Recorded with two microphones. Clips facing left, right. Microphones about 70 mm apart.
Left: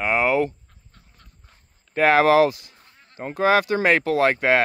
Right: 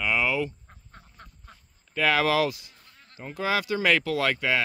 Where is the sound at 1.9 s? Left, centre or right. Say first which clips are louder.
Left 7 dB; left.